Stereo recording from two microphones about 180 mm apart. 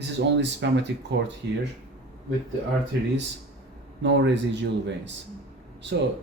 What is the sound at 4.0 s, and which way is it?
Speech, 75° right (ahead or behind).